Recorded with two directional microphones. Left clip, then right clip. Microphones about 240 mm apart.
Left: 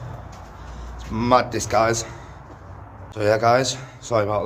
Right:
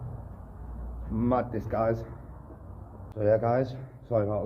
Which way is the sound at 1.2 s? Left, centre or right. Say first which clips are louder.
Left 10 dB; left.